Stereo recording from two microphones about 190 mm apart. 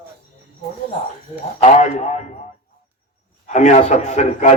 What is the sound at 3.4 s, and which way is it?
Speech, 40° left (ahead or behind).